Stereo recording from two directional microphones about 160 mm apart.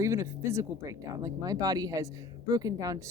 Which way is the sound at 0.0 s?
15° right (ahead or behind).